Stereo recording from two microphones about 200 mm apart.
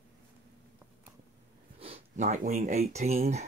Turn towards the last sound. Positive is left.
turn(degrees=-35)  # may be behind; listen again after turning